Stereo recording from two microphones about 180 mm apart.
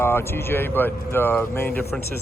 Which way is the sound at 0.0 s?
15° left (ahead or behind).